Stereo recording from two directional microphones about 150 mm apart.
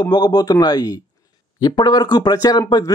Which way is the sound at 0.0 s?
30° left (ahead or behind).